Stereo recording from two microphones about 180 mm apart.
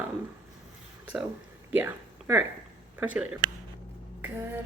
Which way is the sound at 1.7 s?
10° right (ahead or behind).